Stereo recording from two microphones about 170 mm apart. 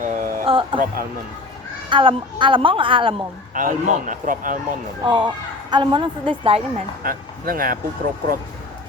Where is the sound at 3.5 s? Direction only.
50° right (ahead or behind).